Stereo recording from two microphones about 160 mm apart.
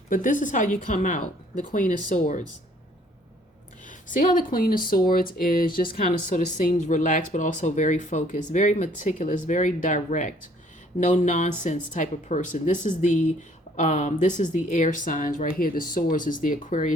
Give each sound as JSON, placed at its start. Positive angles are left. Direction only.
{"t": 0.1, "sound": "speech", "side_deg": 55}
{"t": 3.8, "sound": "speech", "side_deg": 55}